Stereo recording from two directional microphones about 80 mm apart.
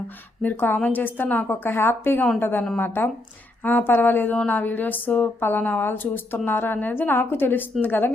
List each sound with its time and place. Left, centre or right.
0.4 s speech: left